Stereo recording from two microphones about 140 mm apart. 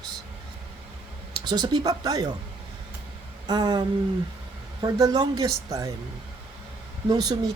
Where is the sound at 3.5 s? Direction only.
30° right (ahead or behind).